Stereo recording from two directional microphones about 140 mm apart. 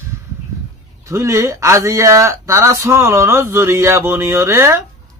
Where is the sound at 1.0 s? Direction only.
20° right (ahead or behind).